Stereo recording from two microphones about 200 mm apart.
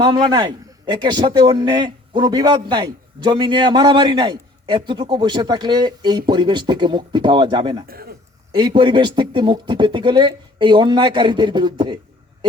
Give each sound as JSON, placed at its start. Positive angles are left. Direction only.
{"t": 0.0, "sound": "a man's voice", "side_deg": -20}
{"t": 7.9, "sound": "a man's voice", "side_deg": -50}
{"t": 8.5, "sound": "a man's voice", "side_deg": -25}